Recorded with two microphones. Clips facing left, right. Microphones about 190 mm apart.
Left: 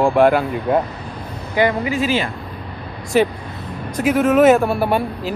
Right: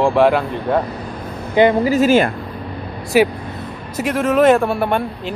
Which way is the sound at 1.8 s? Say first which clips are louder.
Right 6 dB; 45° right (ahead or behind).